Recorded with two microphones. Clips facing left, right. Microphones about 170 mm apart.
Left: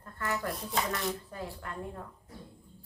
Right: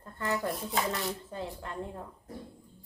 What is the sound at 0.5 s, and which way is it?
Speech, centre (ahead or behind).